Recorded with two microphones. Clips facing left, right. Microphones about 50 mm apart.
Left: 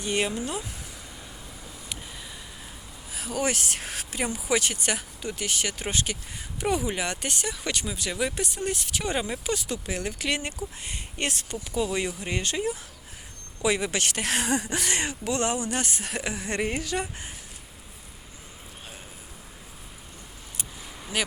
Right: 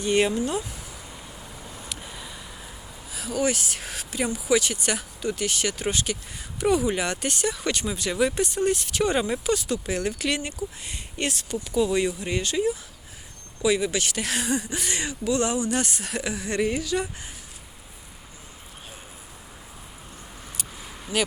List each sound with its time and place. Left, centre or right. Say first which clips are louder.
0.0 s speech: right 5 dB; centre
3.1 s a sound: right 2 dB; left
3.4 s speech: right 3 dB; left
3.8 s speech: right 2 dB; left
4.9 s speech: right 5 dB; centre
5.9 s a woman's voice: right 2 dB; left
6.9 s speech: right 3 dB; centre
9.4 s speech: right 5 dB; centre
10.6 s speech: right 2 dB; left
11.9 s speech: right 5 dB; centre
12.3 s speech: right 2 dB; left
13.6 s speech: right 2 dB; left
15.0 s a woman's voice: right 2 dB; left
21.1 s speech: right 4 dB; centre